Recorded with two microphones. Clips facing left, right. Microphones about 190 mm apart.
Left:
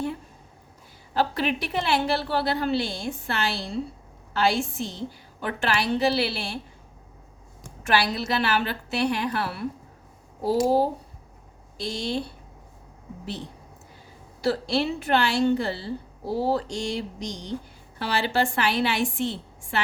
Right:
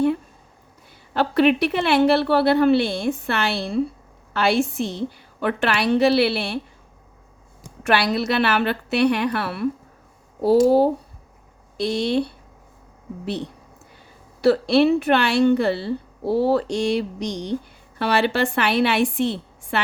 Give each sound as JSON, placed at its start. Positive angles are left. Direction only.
{"t": 1.1, "sound": "a woman's voice", "side_deg": -65}
{"t": 7.9, "sound": "a woman's voice", "side_deg": -65}